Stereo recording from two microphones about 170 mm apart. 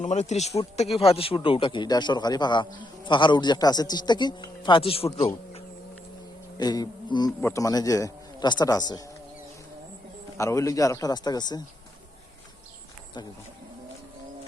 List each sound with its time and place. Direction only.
0.0 s a man's voice: 40° left (ahead or behind)
6.6 s a man's voice: 25° left (ahead or behind)
10.3 s a man's voice: 20° left (ahead or behind)